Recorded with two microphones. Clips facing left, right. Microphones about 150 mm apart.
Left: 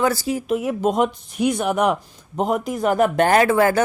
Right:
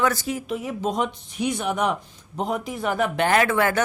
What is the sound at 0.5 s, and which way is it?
Speech, 50° left (ahead or behind).